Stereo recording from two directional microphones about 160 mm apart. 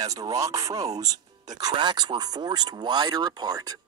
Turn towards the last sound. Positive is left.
turn(degrees=-25)  # may be behind; listen again after turning